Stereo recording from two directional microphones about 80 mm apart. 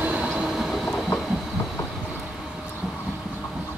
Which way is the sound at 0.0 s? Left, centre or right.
Centre.